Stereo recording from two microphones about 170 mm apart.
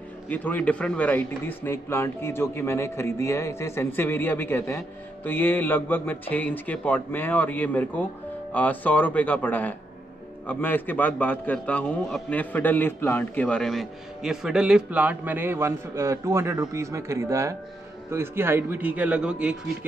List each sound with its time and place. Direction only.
0.3 s a man's voice: 10° left (ahead or behind); by 19.5 s 5° right (ahead or behind)